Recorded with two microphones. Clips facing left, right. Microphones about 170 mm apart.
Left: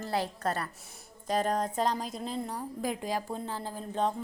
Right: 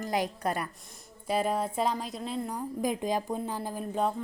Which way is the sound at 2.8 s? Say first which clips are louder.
Right 4 dB; 20° right (ahead or behind).